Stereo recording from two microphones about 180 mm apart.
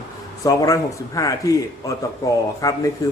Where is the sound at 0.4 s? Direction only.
20° left (ahead or behind).